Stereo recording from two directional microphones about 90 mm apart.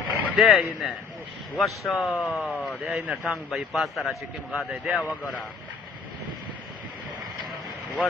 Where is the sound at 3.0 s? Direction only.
15° right (ahead or behind).